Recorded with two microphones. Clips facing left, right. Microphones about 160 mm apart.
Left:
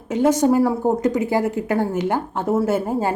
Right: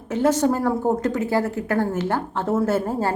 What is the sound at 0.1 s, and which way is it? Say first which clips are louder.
Speech: left 3 dB; 15° left (ahead or behind).